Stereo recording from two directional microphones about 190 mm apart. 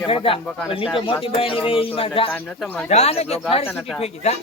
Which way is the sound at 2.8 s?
35° left (ahead or behind).